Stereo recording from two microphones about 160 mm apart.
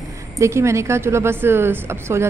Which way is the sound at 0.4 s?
15° right (ahead or behind).